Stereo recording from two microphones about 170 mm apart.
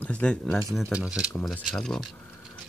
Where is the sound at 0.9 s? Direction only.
5° right (ahead or behind).